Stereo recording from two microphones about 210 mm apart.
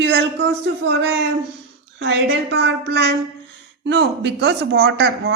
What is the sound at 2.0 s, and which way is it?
A woman's voice, 60° right (ahead or behind).